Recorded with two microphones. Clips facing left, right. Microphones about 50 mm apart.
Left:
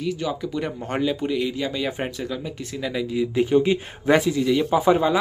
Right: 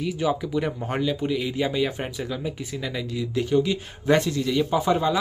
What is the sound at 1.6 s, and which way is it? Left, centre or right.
Speech, centre.